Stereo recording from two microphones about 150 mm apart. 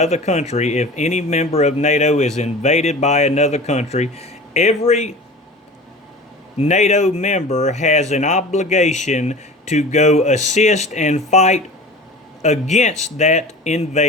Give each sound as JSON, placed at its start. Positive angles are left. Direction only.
{"t": 0.0, "sound": "speech", "side_deg": 50}
{"t": 6.6, "sound": "speech", "side_deg": 50}